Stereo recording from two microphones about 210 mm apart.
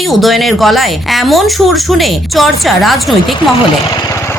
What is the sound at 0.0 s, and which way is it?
Speech, centre (ahead or behind).